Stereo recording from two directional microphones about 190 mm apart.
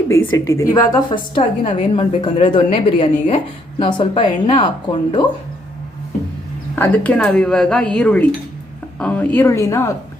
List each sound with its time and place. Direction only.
0.1 s a woman's voice: 90° left
0.6 s a woman's voice: 20° left (ahead or behind)
6.7 s a woman's voice: 10° left (ahead or behind)